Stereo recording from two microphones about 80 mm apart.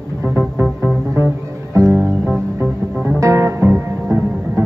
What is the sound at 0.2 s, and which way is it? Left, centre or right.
Music, right.